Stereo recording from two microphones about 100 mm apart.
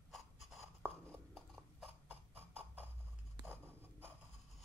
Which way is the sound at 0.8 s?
15° left (ahead or behind).